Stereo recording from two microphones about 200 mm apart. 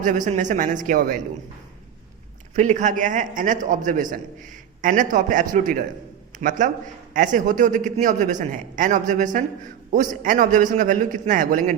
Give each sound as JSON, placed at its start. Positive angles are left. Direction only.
{"t": 0.0, "sound": "a man's voice", "side_deg": -40}
{"t": 2.6, "sound": "a man's voice", "side_deg": -40}